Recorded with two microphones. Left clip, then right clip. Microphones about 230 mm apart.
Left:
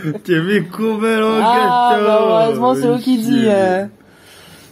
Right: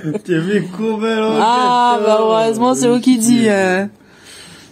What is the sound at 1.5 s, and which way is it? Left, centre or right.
Mantra, right.